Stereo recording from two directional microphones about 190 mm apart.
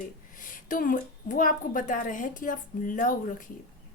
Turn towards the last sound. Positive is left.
turn(degrees=45)  # may be behind; listen again after turning